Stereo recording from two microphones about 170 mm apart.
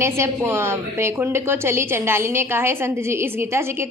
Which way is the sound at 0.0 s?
15° right (ahead or behind).